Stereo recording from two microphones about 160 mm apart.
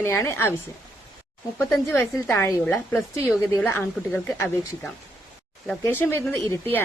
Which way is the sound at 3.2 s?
5° right (ahead or behind).